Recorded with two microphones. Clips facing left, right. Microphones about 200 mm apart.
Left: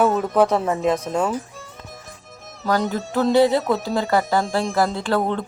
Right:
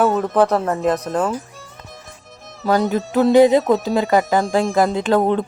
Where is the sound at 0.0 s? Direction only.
Centre (ahead or behind).